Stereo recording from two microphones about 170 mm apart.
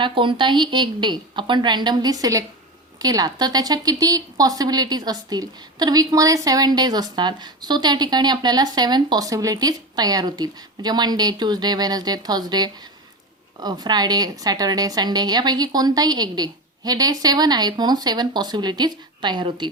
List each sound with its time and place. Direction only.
0.0 s a woman's voice: 30° right (ahead or behind)